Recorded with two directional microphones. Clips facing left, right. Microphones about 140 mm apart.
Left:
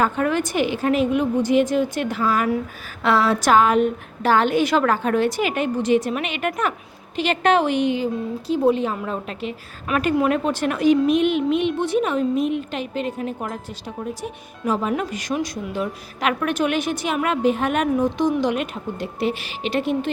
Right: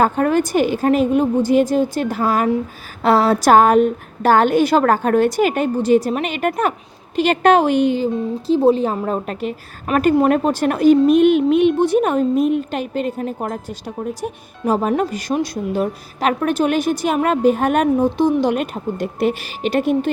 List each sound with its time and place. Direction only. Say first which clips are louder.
0.0 s a woman's voice: right 5 dB; 40° right (ahead or behind)
17.9 s a woman's voice: right 4 dB; 30° right (ahead or behind); by 20.1 s 45° right (ahead or behind)